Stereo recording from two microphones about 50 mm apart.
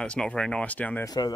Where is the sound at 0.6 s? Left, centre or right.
Left.